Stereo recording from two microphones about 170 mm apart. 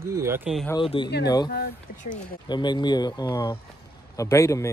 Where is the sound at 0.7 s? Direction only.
25° left (ahead or behind).